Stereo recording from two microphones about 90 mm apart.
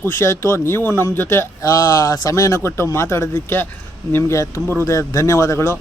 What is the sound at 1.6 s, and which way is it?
Speech, 40° left (ahead or behind).